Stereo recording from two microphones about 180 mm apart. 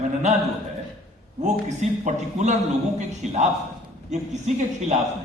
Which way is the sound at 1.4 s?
40° right (ahead or behind).